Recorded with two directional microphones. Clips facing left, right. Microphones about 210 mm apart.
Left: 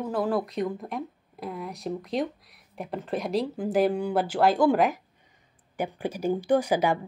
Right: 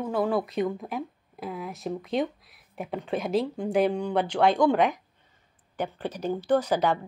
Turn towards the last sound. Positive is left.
turn(degrees=10)  # may be behind; listen again after turning